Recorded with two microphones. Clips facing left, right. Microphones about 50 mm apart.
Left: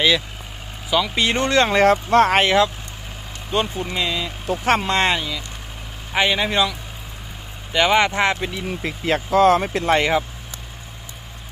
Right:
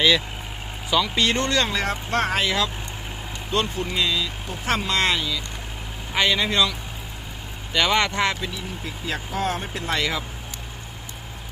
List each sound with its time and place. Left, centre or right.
0.9 s speech: centre; by 1.7 s left
1.7 s speech: left
3.5 s speech: centre
4.6 s speech: left
4.9 s speech: left
7.7 s speech: centre
8.5 s speech: left
9.3 s speech: left
9.9 s speech: left